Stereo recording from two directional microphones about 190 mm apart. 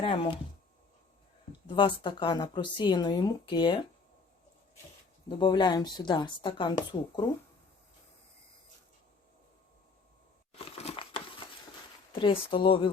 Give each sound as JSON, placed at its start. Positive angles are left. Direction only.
{"t": 0.0, "sound": "speech", "side_deg": 25}
{"t": 1.6, "sound": "speech", "side_deg": 25}
{"t": 5.4, "sound": "speech", "side_deg": 25}
{"t": 10.5, "sound": "crumpling", "side_deg": 30}
{"t": 12.2, "sound": "speech", "side_deg": 25}